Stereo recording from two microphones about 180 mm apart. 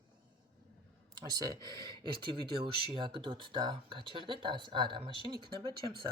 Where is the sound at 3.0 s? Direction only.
25° right (ahead or behind).